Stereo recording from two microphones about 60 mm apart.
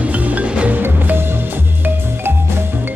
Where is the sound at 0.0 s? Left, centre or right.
Right.